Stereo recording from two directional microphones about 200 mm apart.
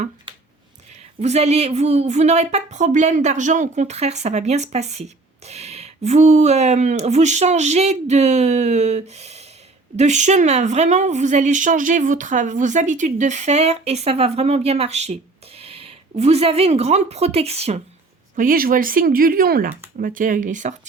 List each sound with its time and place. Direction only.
1.2 s a woman's voice: 35° right (ahead or behind)
18.3 s a woman's voice: 45° right (ahead or behind)